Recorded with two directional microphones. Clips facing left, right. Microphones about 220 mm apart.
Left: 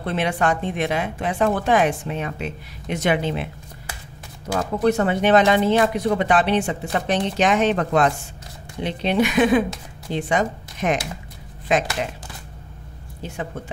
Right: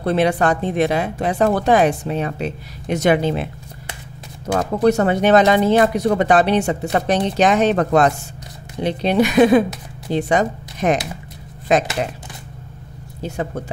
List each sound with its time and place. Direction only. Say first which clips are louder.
0.0 s speech: right 5 dB; 40° right (ahead or behind)
4.6 s speech: right 3 dB; 40° right (ahead or behind)
13.2 s speech: right 6 dB; 40° right (ahead or behind)